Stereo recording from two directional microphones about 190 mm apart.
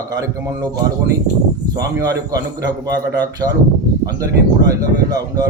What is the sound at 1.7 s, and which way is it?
Speech, 20° right (ahead or behind).